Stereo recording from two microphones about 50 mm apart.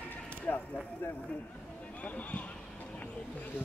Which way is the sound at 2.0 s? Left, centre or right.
Left.